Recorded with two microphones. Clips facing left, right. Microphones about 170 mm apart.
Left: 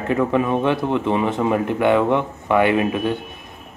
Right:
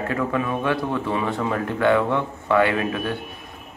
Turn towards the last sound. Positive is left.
turn(degrees=20)  # may be behind; listen again after turning